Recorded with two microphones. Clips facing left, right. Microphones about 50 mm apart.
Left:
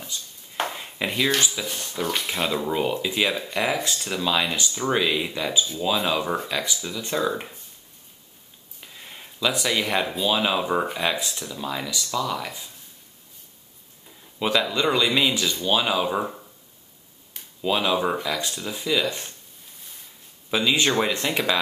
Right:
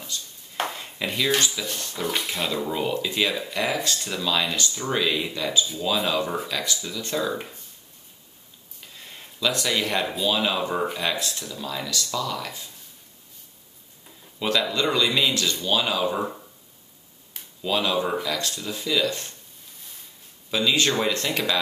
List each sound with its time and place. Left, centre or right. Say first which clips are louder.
0.0 s a sound: even; centre
1.4 s speech: even; centre
3.3 s speech: left 1 dB; centre
3.9 s speech: left 1 dB; centre
8.8 s speech: left 1 dB; centre
14.4 s speech: left 1 dB; centre
17.6 s speech: left 1 dB; centre
20.5 s speech: left 1 dB; centre